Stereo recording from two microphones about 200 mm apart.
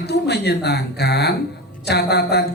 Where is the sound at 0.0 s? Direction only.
55° left (ahead or behind).